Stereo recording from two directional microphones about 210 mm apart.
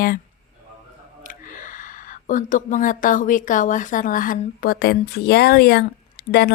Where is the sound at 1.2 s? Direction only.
40° left (ahead or behind).